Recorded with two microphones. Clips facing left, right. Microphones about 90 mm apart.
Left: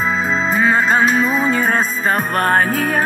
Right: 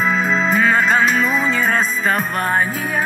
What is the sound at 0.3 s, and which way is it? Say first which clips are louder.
Music: left 1 dB; 30° left (ahead or behind).